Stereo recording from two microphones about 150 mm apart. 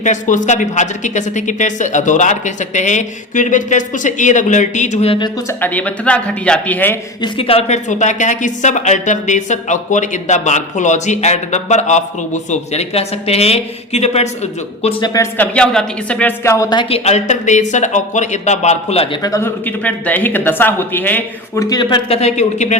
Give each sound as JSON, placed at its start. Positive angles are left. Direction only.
{"t": 0.0, "sound": "speech", "side_deg": 55}
{"t": 5.5, "sound": "speech", "side_deg": 15}
{"t": 7.2, "sound": "speech", "side_deg": 40}
{"t": 15.0, "sound": "a woman's voice", "side_deg": 25}
{"t": 15.4, "sound": "speech", "side_deg": 5}
{"t": 16.4, "sound": "a woman's voice", "side_deg": 20}
{"t": 16.9, "sound": "speech", "side_deg": 45}
{"t": 19.1, "sound": "speech", "side_deg": 25}
{"t": 22.2, "sound": "speech", "side_deg": 50}